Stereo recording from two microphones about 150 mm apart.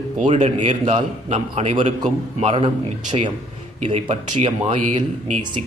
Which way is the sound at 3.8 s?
45° right (ahead or behind).